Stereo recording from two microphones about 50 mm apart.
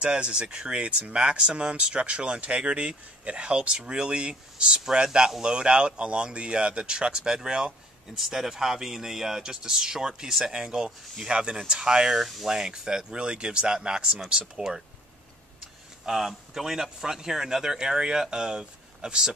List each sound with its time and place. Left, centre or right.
0.0 s speech: centre
12.2 s speech: centre
16.1 s speech: centre